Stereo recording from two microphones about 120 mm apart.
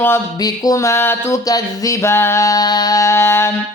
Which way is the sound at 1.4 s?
30° left (ahead or behind).